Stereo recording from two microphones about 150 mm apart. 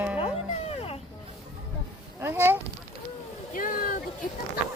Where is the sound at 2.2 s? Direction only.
15° right (ahead or behind).